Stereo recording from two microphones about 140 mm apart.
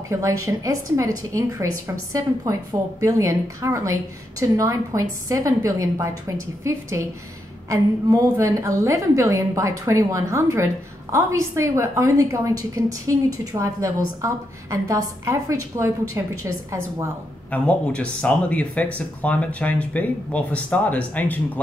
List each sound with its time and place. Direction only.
0.1 s a woman's voice: 20° right (ahead or behind)
3.0 s a woman's voice: 25° right (ahead or behind)
17.5 s speech: 10° left (ahead or behind)